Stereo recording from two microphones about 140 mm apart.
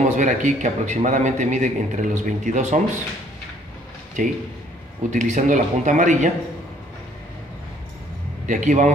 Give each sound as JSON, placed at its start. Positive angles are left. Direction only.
{"t": 0.0, "sound": "a man's voice", "side_deg": -60}
{"t": 4.2, "sound": "a man's voice", "side_deg": -65}
{"t": 8.5, "sound": "a man's voice", "side_deg": -65}